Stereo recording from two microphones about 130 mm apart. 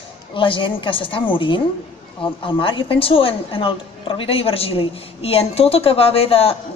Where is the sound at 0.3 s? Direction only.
40° left (ahead or behind).